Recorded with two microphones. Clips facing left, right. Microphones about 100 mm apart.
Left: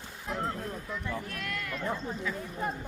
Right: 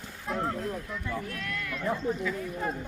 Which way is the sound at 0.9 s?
5° left (ahead or behind).